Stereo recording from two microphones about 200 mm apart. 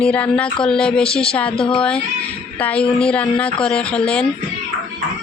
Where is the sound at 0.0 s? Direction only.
5° left (ahead or behind).